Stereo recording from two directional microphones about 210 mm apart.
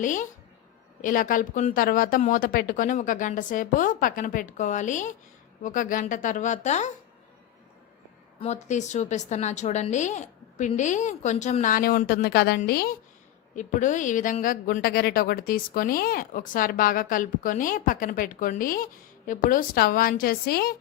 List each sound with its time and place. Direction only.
0.0 s a woman's voice: 35° left (ahead or behind)
8.4 s a woman's voice: 35° left (ahead or behind)